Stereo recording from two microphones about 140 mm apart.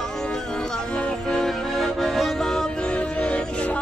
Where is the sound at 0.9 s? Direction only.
5° left (ahead or behind).